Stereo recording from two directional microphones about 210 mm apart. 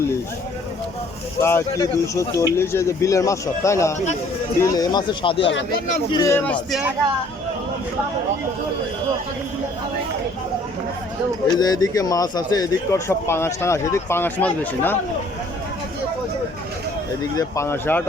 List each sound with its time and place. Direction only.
1.4 s speech: 10° left (ahead or behind)
11.5 s speech: 20° left (ahead or behind)
17.3 s speech: 15° left (ahead or behind)